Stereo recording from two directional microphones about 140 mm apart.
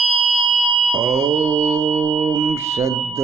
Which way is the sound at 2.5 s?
20° right (ahead or behind).